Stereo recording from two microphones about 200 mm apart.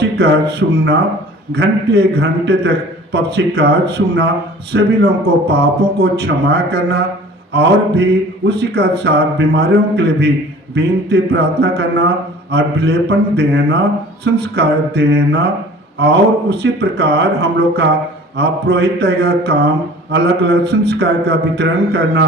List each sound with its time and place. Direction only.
0.0 s speech: 55° right (ahead or behind)
1.5 s mantra: 55° right (ahead or behind)